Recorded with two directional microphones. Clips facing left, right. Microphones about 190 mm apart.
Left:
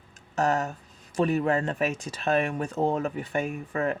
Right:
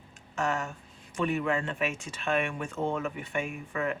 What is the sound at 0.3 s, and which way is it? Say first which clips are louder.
Speech: left 5 dB; 40° left (ahead or behind).